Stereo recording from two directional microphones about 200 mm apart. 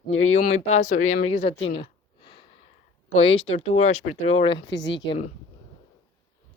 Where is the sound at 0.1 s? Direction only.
90° left.